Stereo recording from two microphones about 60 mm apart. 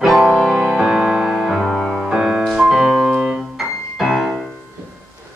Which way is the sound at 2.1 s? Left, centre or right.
Centre.